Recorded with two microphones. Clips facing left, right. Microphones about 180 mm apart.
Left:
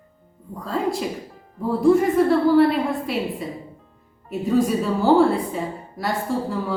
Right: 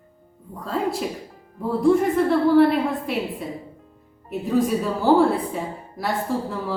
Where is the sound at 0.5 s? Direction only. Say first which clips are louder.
Left 1 dB; centre (ahead or behind).